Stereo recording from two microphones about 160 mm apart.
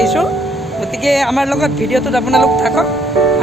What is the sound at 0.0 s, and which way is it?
Speech, centre (ahead or behind).